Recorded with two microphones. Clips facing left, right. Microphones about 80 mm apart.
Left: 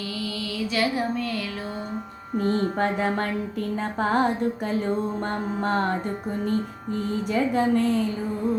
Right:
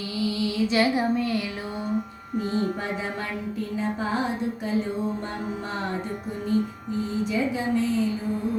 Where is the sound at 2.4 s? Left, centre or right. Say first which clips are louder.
Left 4 dB; left.